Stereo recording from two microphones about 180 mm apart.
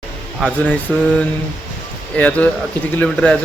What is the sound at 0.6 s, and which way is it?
A man's voice, 5° left (ahead or behind).